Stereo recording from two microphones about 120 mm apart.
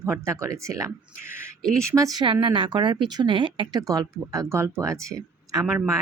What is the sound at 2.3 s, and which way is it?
A woman's voice, 45° right (ahead or behind).